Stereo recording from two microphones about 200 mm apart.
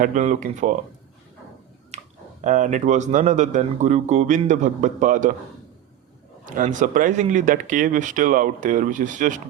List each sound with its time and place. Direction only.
0.0 s speech: 40° right (ahead or behind)
1.9 s a sound: 35° right (ahead or behind)
2.4 s speech: 40° right (ahead or behind)
6.4 s speech: 40° right (ahead or behind)